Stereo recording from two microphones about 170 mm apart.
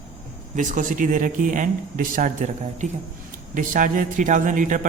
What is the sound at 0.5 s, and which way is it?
Speech, 50° right (ahead or behind).